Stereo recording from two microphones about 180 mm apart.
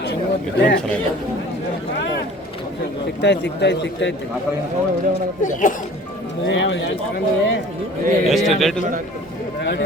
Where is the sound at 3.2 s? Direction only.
70° left (ahead or behind).